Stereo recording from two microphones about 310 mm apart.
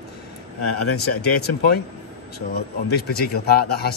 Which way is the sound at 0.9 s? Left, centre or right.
Left.